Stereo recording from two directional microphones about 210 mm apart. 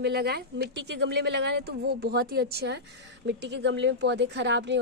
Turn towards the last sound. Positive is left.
turn(degrees=-55)  # may be behind; listen again after turning